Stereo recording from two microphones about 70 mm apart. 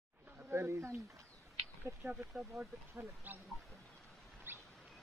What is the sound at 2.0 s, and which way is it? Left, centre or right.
Speech, right.